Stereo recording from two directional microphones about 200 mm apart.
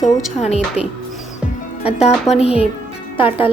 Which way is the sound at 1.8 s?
30° left (ahead or behind).